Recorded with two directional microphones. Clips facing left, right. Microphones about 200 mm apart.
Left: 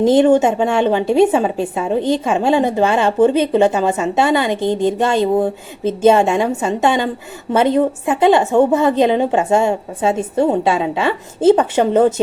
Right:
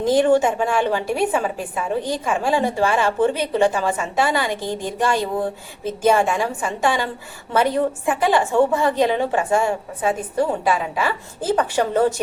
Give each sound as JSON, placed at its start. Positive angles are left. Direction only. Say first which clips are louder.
{"t": 0.0, "sound": "a woman's voice", "louder": "left 5 dB", "side_deg": 25}